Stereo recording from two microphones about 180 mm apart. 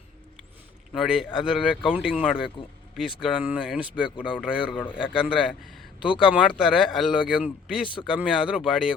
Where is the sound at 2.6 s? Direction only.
25° left (ahead or behind).